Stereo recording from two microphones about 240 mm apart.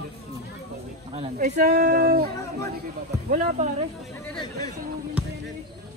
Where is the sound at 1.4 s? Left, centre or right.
Right.